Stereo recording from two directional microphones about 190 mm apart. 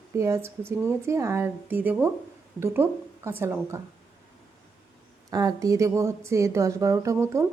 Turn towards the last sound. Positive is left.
turn(degrees=-15)  # may be behind; listen again after turning